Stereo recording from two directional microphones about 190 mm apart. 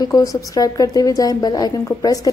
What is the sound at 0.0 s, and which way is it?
A woman's voice, 20° left (ahead or behind).